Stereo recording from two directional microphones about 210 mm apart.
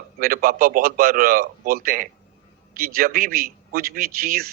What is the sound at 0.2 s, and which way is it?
A man's voice, 45° right (ahead or behind).